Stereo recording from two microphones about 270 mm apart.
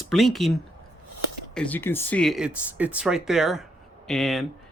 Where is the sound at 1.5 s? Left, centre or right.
Centre.